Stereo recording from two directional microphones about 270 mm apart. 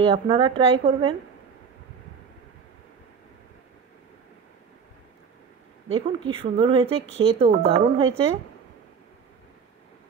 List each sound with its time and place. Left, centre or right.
0.0 s speech: centre
5.9 s speech: centre